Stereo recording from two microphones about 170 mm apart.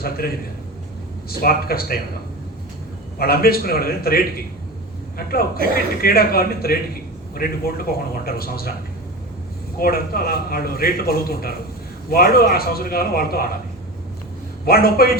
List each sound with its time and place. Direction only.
0.0 s a man's voice: 60° left (ahead or behind)
3.2 s a man's voice: 65° left (ahead or behind)
9.7 s a man's voice: 60° left (ahead or behind)
14.7 s a man's voice: 60° left (ahead or behind)